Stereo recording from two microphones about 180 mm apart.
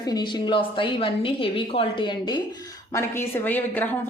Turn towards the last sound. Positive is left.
turn(degrees=10)  # may be behind; listen again after turning